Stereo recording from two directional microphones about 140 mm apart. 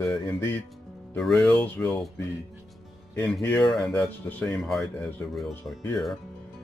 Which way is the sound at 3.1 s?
10° left (ahead or behind).